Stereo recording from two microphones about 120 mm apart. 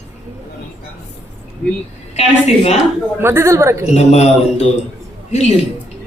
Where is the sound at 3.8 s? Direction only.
65° left (ahead or behind).